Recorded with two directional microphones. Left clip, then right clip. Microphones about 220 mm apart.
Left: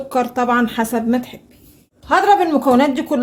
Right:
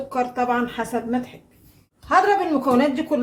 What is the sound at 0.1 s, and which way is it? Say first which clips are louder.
Speech: left 5 dB; 45° left (ahead or behind).